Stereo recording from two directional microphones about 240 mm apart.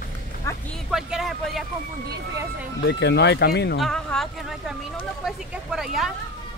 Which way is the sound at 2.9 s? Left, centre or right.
Left.